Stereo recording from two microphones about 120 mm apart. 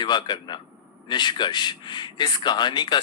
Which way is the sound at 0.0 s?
40° left (ahead or behind).